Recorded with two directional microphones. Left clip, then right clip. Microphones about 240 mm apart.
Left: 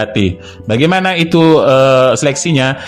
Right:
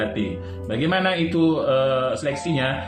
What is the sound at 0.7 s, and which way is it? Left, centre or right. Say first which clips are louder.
Speech: left 10 dB; left.